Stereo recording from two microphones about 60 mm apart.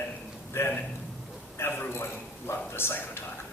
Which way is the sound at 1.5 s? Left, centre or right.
Left.